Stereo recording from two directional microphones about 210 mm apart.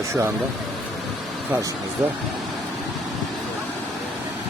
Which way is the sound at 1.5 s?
15° right (ahead or behind).